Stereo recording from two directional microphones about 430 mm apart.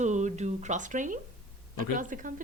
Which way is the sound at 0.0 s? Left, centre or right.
Centre.